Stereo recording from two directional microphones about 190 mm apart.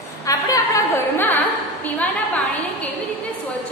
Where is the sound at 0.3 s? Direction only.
15° left (ahead or behind).